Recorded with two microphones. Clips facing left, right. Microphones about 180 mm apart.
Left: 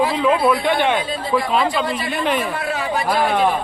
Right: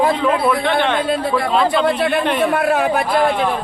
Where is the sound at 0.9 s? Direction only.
60° right (ahead or behind).